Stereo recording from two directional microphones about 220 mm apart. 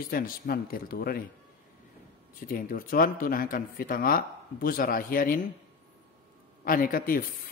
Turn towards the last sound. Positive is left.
turn(degrees=40)  # may be behind; listen again after turning